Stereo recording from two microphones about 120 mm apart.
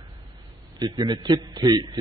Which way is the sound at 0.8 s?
35° right (ahead or behind).